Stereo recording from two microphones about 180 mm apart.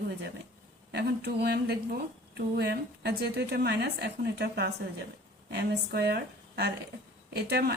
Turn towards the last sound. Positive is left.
turn(degrees=-65)  # may be behind; listen again after turning